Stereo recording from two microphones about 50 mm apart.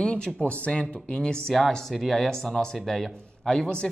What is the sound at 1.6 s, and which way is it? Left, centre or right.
Speech, centre.